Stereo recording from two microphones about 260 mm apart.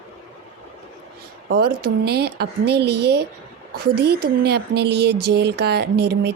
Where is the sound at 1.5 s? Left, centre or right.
Right.